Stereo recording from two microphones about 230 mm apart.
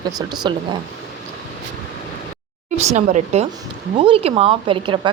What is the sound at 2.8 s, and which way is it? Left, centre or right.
A woman's voice, right.